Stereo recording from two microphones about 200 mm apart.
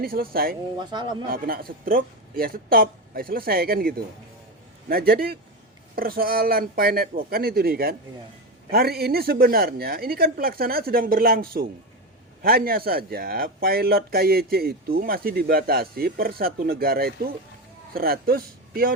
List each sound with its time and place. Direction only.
0.0 s speech: 45° right (ahead or behind)
0.8 s speech: 20° right (ahead or behind)
1.3 s speech: 45° right (ahead or behind)